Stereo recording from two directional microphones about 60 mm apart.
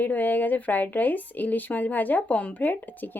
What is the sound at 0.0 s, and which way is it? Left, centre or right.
Speech, left.